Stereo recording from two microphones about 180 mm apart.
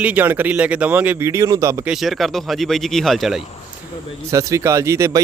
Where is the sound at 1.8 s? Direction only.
Centre (ahead or behind).